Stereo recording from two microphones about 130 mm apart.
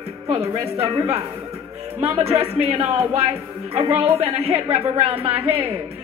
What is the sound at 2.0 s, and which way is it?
A woman's voice, 50° right (ahead or behind).